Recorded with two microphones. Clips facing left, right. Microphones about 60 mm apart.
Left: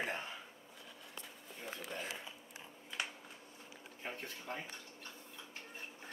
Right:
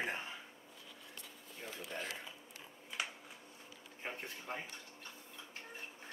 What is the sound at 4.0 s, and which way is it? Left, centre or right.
Speech, centre.